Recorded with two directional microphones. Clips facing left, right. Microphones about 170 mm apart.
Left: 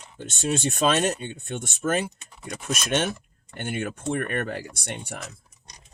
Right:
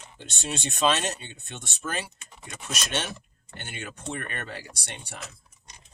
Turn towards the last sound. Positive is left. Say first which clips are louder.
# left 7 dB
turn(degrees=55)  # may be behind; listen again after turning